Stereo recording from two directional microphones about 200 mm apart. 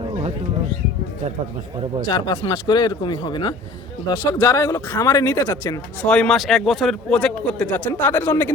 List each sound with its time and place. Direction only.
2.0 s speech: 20° left (ahead or behind)
6.0 s a man's voice: 5° left (ahead or behind)